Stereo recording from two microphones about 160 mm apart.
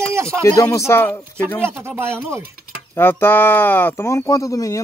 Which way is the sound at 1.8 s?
15° right (ahead or behind).